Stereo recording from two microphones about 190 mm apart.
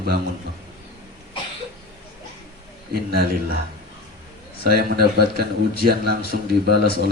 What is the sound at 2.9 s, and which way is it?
Speech, 55° right (ahead or behind).